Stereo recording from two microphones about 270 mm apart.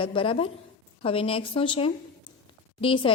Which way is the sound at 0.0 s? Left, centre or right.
Centre.